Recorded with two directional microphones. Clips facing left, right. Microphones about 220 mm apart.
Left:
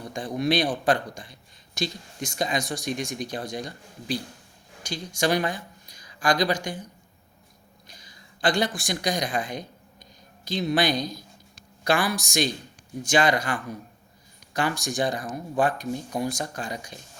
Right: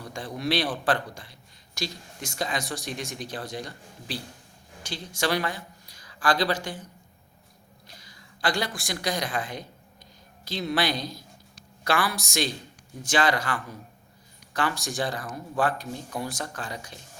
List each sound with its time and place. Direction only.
0.0 s a man's voice: 15° left (ahead or behind)
7.9 s a man's voice: 20° left (ahead or behind)